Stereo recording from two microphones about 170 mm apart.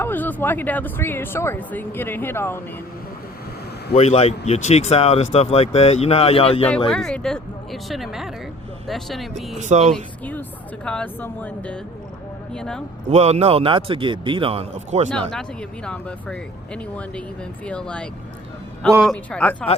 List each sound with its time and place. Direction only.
0.0 s speech: 10° left (ahead or behind)
3.9 s speech: 40° left (ahead or behind)
6.7 s speech: 5° left (ahead or behind)
9.6 s speech: 45° right (ahead or behind)
9.9 s speech: 10° left (ahead or behind)
13.1 s speech: 40° right (ahead or behind)
15.3 s speech: 5° left (ahead or behind)